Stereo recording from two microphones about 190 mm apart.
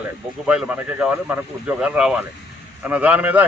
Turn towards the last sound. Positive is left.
turn(degrees=-10)  # may be behind; listen again after turning